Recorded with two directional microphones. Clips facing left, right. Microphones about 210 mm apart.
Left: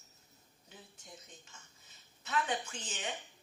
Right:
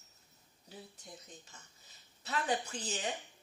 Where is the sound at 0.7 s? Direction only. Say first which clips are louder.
Right 4 dB; 35° right (ahead or behind).